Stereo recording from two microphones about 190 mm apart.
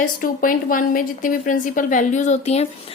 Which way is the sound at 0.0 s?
45° left (ahead or behind).